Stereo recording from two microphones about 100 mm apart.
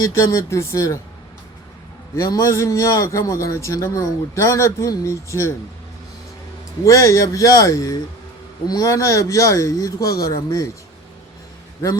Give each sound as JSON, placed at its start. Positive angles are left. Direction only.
{"t": 0.0, "sound": "a man's voice", "side_deg": 30}
{"t": 2.1, "sound": "a man's voice", "side_deg": 30}
{"t": 6.8, "sound": "a man's voice", "side_deg": 30}